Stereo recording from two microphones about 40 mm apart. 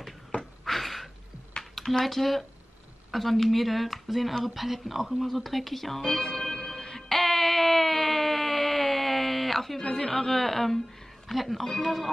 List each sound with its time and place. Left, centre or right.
0.7 s a sound: centre
2.0 s speech: centre
6.0 s music: centre
9.8 s a woman's voice: centre